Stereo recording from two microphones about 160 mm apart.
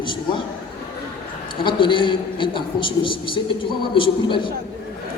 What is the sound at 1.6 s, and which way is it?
A man's voice, 30° left (ahead or behind).